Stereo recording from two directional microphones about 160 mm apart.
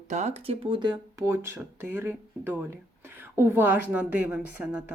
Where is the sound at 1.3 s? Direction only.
15° right (ahead or behind).